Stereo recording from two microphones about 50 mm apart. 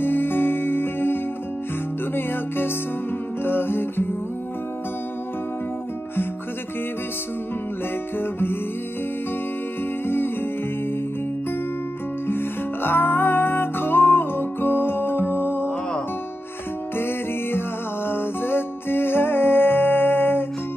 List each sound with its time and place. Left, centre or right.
0.0 s music: left
8.2 s music: left
10.0 s guitar: left
12.3 s music: left
16.9 s music: left